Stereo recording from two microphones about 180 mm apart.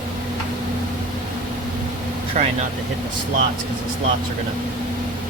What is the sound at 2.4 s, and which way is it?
Speech, 40° right (ahead or behind).